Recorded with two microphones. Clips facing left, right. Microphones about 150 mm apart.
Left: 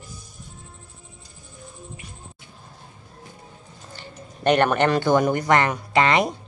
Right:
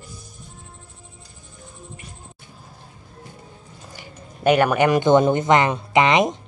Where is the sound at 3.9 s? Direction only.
10° right (ahead or behind).